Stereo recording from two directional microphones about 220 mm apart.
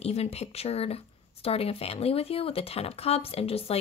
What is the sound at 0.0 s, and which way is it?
Speech, 30° left (ahead or behind).